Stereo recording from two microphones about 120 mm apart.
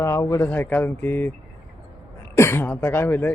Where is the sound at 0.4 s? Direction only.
15° left (ahead or behind).